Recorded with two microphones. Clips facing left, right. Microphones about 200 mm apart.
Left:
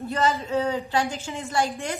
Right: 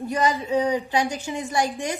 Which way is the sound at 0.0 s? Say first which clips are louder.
Right 1 dB; 15° right (ahead or behind).